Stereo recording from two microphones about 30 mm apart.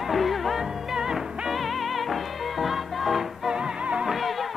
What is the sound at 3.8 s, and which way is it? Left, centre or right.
Music, right.